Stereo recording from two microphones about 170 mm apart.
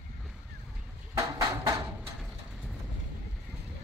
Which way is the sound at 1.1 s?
20° right (ahead or behind).